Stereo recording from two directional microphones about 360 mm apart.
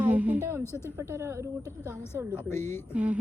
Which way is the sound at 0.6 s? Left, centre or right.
Centre.